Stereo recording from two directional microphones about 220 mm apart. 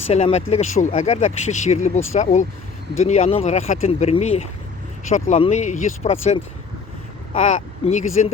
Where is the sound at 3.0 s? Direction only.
30° left (ahead or behind).